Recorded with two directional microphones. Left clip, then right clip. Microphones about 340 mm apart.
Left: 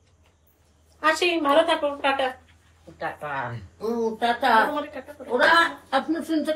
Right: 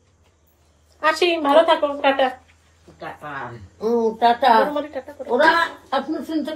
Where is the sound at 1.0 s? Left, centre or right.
Centre.